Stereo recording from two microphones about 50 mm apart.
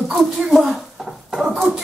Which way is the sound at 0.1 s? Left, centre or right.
Centre.